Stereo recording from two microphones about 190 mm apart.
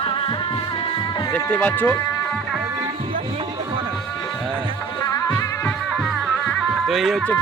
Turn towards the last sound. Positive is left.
turn(degrees=0)  # may be behind; listen again after turning